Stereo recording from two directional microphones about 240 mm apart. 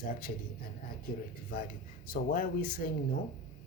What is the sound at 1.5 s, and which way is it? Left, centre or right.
Speech, left.